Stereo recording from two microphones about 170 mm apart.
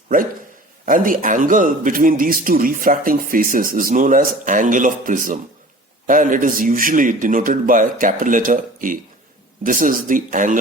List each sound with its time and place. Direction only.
0.9 s a man's voice: 55° right (ahead or behind)